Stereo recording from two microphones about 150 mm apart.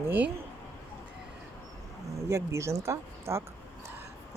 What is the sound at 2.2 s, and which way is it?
Speech, 20° right (ahead or behind).